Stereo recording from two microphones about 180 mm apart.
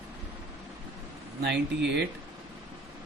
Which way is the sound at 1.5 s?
70° right (ahead or behind).